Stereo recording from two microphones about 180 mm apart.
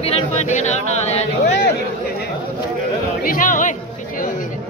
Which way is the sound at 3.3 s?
45° left (ahead or behind).